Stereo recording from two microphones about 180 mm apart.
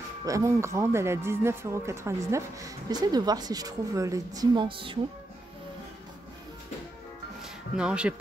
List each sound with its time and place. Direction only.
0.2 s speech: 20° right (ahead or behind)
7.7 s speech: 5° right (ahead or behind)